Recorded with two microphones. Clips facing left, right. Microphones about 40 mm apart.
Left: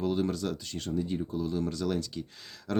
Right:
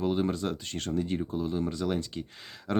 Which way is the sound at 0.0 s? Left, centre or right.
Right.